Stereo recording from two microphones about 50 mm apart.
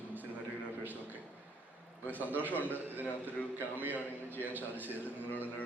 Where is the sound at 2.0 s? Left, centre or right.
Right.